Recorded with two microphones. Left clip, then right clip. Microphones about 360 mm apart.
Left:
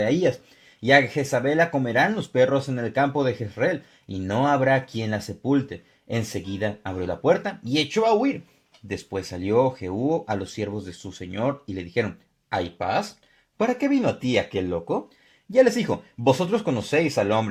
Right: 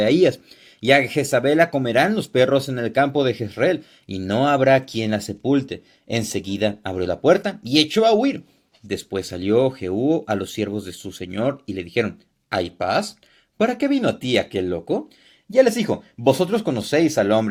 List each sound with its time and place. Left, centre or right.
0.0 s speech: centre